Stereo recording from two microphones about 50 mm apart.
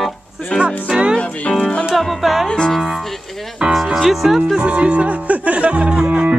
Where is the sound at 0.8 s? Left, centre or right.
Centre.